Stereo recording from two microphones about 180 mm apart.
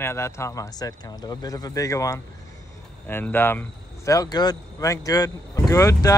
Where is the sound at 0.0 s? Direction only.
15° left (ahead or behind).